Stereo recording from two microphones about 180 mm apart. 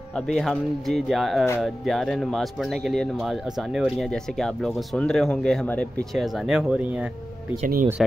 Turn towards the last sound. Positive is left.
turn(degrees=-45)  # may be behind; listen again after turning